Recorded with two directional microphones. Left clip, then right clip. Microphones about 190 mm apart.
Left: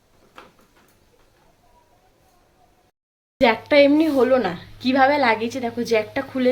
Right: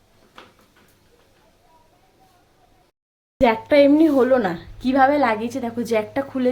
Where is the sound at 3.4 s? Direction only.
10° right (ahead or behind).